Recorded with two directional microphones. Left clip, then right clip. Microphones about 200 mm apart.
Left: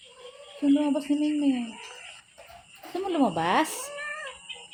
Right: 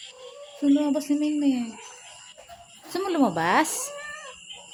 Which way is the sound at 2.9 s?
5° right (ahead or behind).